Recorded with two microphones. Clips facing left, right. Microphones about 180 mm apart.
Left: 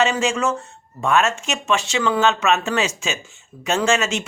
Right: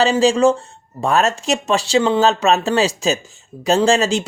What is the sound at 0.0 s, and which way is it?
Speech, 35° right (ahead or behind).